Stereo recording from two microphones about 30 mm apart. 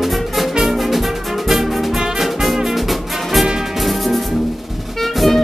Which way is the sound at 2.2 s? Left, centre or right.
Centre.